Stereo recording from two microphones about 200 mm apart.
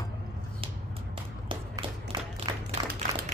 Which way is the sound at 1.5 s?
25° right (ahead or behind).